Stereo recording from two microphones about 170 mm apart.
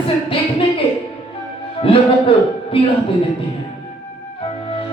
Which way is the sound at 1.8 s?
30° left (ahead or behind).